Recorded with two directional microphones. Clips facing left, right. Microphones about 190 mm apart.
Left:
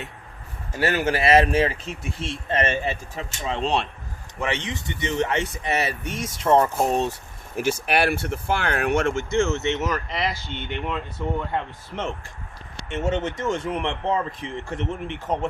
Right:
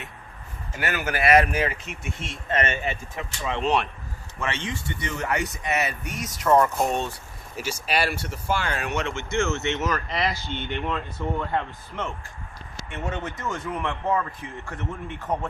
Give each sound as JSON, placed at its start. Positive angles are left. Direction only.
{"t": 0.8, "sound": "speech", "side_deg": 30}
{"t": 4.4, "sound": "speech", "side_deg": 15}
{"t": 7.5, "sound": "speech", "side_deg": 55}
{"t": 9.3, "sound": "speech", "side_deg": 30}
{"t": 9.8, "sound": "speech", "side_deg": 5}
{"t": 10.8, "sound": "speech", "side_deg": 10}
{"t": 14.3, "sound": "a man's voice", "side_deg": 90}
{"t": 15.3, "sound": "speech", "side_deg": 20}